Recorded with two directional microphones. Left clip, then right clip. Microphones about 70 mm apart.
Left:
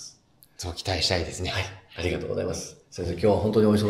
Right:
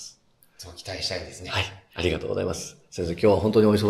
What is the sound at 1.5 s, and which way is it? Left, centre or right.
Speech, right.